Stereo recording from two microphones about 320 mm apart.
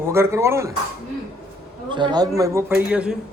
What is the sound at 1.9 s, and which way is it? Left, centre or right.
A man's voice, centre.